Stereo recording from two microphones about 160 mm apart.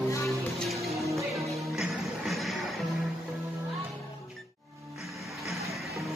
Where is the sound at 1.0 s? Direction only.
20° right (ahead or behind).